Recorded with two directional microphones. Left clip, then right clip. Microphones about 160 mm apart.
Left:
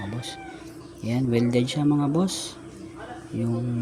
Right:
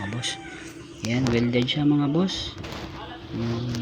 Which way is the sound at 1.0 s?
10° left (ahead or behind).